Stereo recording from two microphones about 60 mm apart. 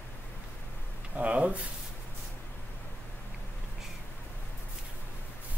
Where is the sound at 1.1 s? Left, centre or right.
Right.